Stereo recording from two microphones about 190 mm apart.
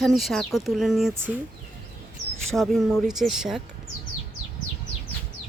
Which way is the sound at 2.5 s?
Centre (ahead or behind).